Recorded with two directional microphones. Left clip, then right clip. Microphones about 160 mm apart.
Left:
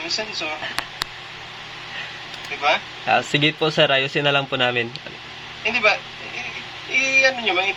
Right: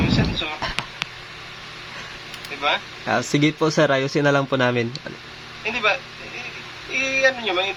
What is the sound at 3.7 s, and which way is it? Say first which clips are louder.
Speech: left 1 dB; 85° right.